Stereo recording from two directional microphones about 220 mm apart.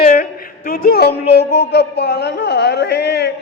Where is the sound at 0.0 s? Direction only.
35° left (ahead or behind).